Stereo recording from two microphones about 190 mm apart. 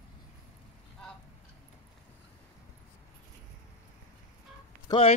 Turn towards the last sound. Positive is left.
turn(degrees=20)  # may be behind; listen again after turning